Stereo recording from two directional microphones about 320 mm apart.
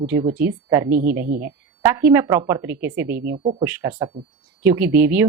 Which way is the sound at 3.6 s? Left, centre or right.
Centre.